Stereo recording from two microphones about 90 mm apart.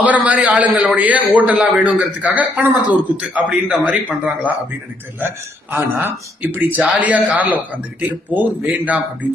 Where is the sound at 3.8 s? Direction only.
20° right (ahead or behind).